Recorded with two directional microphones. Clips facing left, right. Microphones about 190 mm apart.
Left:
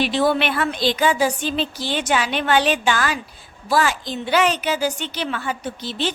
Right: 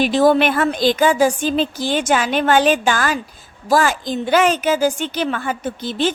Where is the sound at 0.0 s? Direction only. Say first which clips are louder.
Right 5 dB; 45° right (ahead or behind).